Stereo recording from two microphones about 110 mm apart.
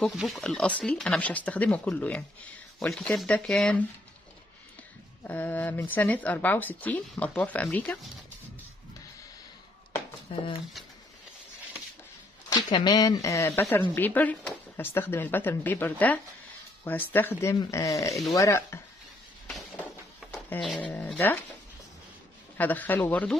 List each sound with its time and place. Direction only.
0.0 s speech: centre (ahead or behind)
5.2 s speech: 15° left (ahead or behind)
10.3 s speech: 65° left (ahead or behind)
12.4 s speech: 40° left (ahead or behind)
19.4 s a sound: 5° left (ahead or behind)
20.8 s speech: 15° left (ahead or behind)
22.6 s speech: 15° left (ahead or behind)